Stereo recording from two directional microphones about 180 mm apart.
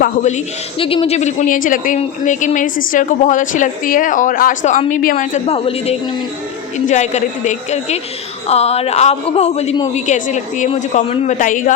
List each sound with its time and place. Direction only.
0.0 s a woman's voice: 40° left (ahead or behind)